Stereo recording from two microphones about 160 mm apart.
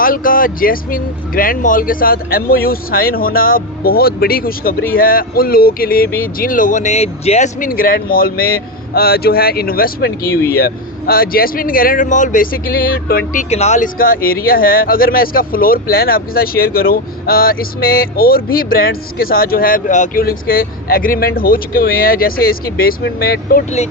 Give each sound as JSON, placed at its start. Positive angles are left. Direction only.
{"t": 0.0, "sound": "speech", "side_deg": 60}
{"t": 13.5, "sound": "speech", "side_deg": 45}
{"t": 20.2, "sound": "speech", "side_deg": 65}